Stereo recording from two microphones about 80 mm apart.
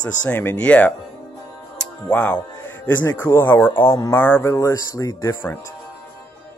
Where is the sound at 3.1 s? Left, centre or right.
Left.